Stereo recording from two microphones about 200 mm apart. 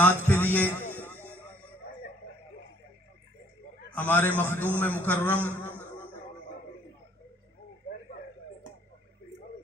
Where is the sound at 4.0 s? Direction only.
10° left (ahead or behind).